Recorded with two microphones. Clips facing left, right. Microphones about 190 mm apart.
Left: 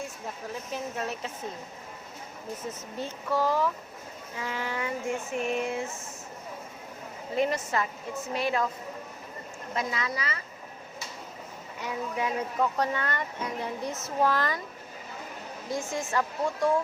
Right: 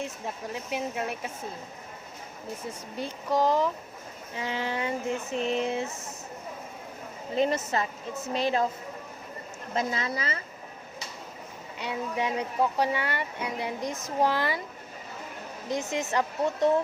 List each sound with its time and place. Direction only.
0.7 s speech: 10° right (ahead or behind)
2.6 s speech: 15° right (ahead or behind)
7.3 s speech: 25° right (ahead or behind)
9.7 s speech: 30° right (ahead or behind)
12.1 s speech: 20° right (ahead or behind)
12.5 s speech: 10° right (ahead or behind)
15.7 s speech: 20° right (ahead or behind)